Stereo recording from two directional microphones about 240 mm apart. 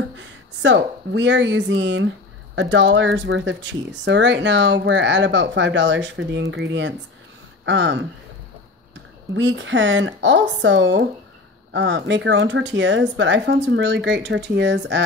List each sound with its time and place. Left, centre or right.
0.2 s speech: right
9.3 s speech: right